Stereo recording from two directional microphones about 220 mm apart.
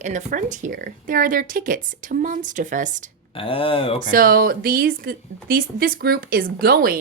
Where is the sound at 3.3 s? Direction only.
25° left (ahead or behind).